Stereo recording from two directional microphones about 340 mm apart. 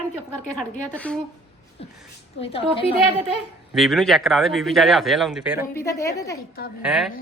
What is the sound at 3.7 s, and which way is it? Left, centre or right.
Speech, centre.